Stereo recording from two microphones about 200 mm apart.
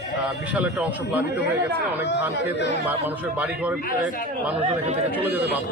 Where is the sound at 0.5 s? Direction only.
5° right (ahead or behind).